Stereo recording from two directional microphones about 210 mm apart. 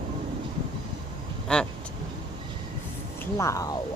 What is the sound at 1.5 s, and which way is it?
Speech, 5° left (ahead or behind).